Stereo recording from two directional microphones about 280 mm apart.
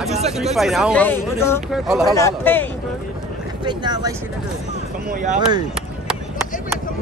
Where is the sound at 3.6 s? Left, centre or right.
Centre.